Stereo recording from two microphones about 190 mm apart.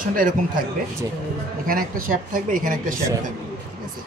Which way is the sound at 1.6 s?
50° right (ahead or behind).